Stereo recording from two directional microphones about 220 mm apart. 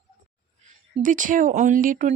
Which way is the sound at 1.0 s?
35° right (ahead or behind).